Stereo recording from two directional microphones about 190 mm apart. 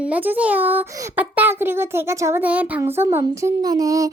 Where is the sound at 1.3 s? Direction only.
10° right (ahead or behind).